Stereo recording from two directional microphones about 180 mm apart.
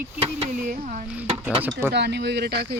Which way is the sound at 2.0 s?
70° right (ahead or behind).